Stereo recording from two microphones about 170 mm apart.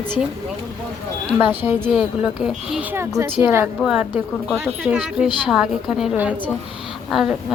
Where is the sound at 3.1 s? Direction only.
15° right (ahead or behind).